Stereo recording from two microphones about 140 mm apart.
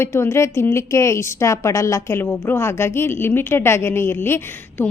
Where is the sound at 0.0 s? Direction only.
20° left (ahead or behind).